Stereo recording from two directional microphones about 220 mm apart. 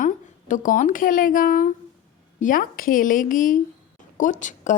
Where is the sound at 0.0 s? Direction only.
35° left (ahead or behind).